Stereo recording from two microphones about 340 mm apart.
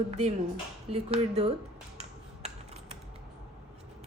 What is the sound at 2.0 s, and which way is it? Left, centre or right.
Finger snapping, centre.